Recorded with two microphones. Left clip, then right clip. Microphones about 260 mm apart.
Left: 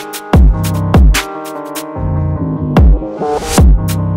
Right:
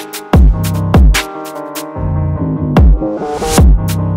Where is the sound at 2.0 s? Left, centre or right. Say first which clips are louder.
Even; left.